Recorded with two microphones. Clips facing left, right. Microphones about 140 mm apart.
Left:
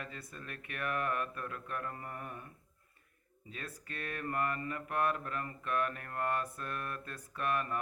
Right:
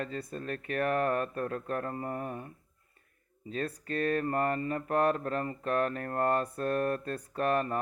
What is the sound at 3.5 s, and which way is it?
Mantra, 35° right (ahead or behind).